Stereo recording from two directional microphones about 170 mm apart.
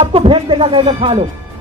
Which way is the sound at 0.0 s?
35° right (ahead or behind).